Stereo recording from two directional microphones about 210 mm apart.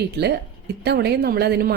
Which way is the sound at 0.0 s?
50° right (ahead or behind).